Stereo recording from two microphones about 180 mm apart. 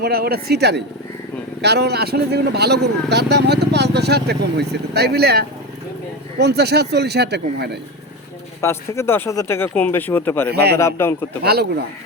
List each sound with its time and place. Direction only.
0.0 s speech: 60° right (ahead or behind)
8.6 s speech: 15° left (ahead or behind)
10.5 s speech: 65° right (ahead or behind)
10.8 s speech: 15° left (ahead or behind)